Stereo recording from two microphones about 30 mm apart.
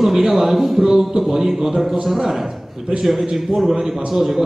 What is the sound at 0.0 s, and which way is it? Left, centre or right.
A man's voice, centre.